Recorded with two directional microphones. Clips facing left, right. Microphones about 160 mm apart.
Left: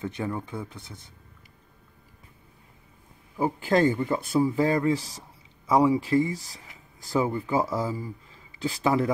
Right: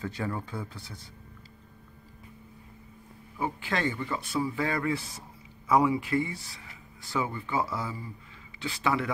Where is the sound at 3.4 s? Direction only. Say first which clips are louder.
Left 8 dB; 40° left (ahead or behind).